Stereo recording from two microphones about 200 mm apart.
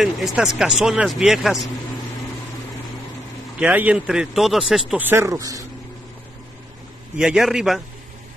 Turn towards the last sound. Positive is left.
turn(degrees=0)  # may be behind; listen again after turning